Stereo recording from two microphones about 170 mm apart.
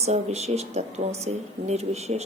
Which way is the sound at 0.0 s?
40° right (ahead or behind).